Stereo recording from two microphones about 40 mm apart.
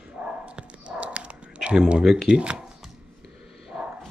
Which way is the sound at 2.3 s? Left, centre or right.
Right.